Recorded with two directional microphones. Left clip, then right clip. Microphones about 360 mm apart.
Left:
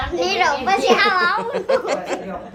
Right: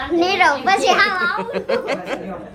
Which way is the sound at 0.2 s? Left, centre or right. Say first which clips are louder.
Right 3 dB; centre.